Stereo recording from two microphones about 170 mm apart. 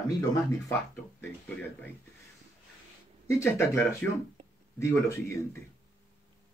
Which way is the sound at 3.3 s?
15° left (ahead or behind).